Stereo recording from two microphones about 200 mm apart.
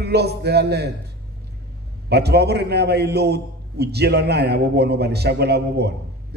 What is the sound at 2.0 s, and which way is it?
A man's voice, 55° right (ahead or behind).